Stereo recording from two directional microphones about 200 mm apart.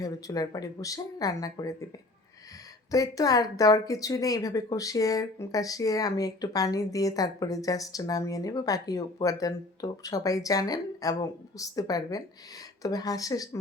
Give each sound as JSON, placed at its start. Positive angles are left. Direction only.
{"t": 0.0, "sound": "speech", "side_deg": 15}
{"t": 2.9, "sound": "speech", "side_deg": 15}